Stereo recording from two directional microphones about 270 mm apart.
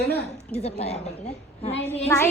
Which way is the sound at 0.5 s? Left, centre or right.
Left.